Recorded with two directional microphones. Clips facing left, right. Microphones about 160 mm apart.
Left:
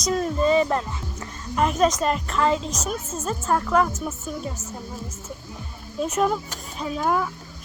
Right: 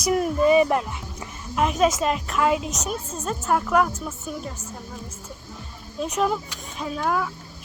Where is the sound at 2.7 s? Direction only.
Centre (ahead or behind).